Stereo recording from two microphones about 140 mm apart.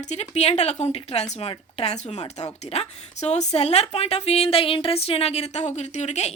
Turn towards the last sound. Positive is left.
turn(degrees=50)  # may be behind; listen again after turning